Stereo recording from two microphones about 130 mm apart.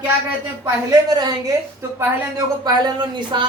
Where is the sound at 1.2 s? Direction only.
30° right (ahead or behind).